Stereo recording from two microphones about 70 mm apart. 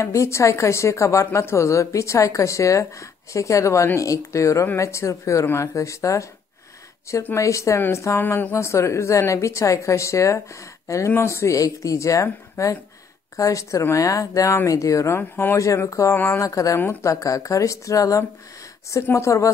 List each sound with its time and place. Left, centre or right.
0.0 s a woman's voice: left
7.3 s a woman's voice: left
8.2 s speech: left
8.5 s a woman's voice: left
15.1 s speech: left
15.5 s a woman's voice: left